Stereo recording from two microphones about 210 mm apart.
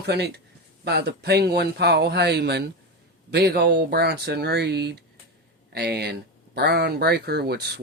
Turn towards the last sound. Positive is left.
turn(degrees=-50)  # may be behind; listen again after turning